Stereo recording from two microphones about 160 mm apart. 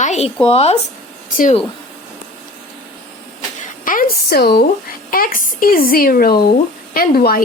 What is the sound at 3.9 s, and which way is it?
Speech, 65° left (ahead or behind).